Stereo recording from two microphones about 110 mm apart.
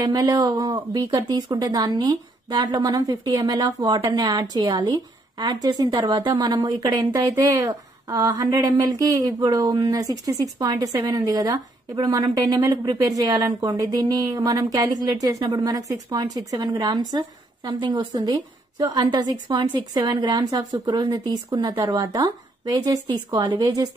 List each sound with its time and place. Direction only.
0.0 s a woman's voice: 35° right (ahead or behind)
21.8 s speech: 35° right (ahead or behind)